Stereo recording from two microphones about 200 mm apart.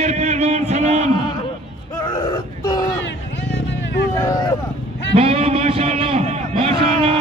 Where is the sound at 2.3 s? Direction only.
20° left (ahead or behind).